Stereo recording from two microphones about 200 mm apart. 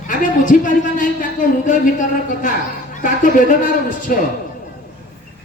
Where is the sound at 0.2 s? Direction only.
40° left (ahead or behind).